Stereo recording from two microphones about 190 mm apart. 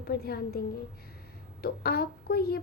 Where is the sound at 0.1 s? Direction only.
55° left (ahead or behind).